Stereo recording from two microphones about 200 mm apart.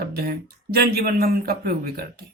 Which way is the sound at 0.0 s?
50° right (ahead or behind).